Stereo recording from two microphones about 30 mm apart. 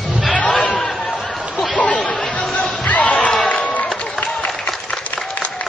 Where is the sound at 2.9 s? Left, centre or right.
Left.